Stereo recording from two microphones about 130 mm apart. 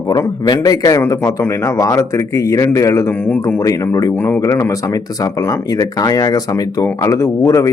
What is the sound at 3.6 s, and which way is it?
Speech, 25° left (ahead or behind).